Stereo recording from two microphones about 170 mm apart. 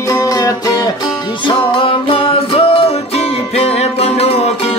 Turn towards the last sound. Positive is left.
turn(degrees=35)  # may be behind; listen again after turning